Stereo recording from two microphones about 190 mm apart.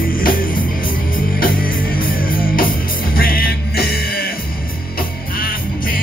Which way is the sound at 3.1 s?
50° left (ahead or behind).